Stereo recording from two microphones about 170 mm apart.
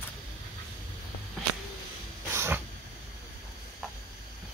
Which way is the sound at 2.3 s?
15° right (ahead or behind).